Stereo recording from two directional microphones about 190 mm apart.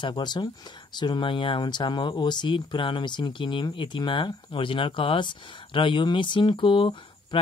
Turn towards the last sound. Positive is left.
turn(degrees=25)  # may be behind; listen again after turning